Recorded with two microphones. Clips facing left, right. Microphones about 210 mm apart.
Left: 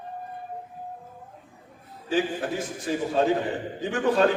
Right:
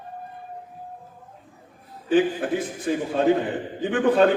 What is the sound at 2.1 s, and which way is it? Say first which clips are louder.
A man's voice: right 5 dB; 55° right (ahead or behind).